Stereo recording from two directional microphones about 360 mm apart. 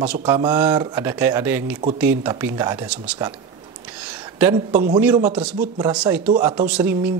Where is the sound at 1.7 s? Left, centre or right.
Centre.